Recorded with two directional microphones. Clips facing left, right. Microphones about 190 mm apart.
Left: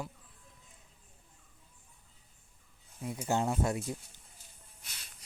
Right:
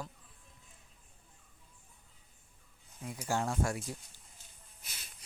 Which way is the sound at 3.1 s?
20° left (ahead or behind).